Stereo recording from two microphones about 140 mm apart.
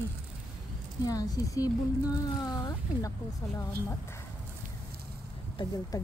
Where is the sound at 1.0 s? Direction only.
25° left (ahead or behind).